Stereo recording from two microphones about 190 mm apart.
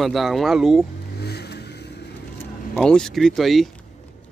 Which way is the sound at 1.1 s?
60° left (ahead or behind).